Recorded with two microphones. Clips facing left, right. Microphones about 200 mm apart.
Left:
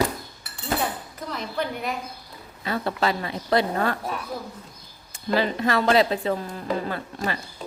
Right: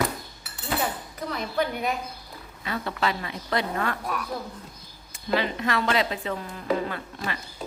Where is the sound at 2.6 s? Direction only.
35° left (ahead or behind).